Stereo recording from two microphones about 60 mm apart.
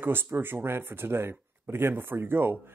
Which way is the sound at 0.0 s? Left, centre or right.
Right.